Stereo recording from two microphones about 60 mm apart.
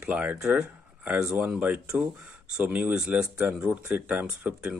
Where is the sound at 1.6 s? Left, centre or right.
Right.